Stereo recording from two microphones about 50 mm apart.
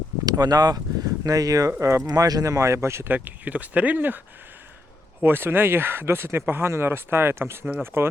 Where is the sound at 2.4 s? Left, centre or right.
Right.